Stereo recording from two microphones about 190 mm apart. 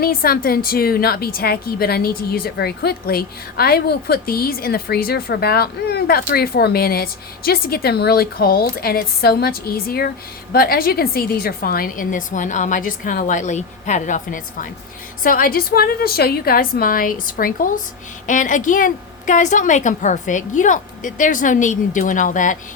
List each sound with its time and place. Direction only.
0.0 s a woman's voice: 50° left (ahead or behind)